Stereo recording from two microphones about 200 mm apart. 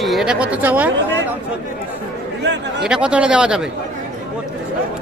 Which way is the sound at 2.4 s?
60° right (ahead or behind).